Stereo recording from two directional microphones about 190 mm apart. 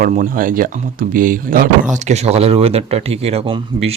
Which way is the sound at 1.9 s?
35° right (ahead or behind).